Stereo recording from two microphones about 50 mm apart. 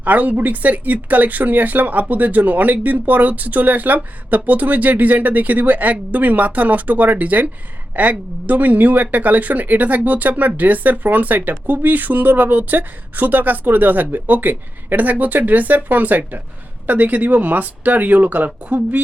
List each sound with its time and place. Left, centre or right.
0.0 s speech: right